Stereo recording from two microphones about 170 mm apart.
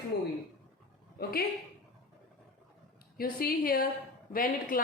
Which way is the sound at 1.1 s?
60° left (ahead or behind).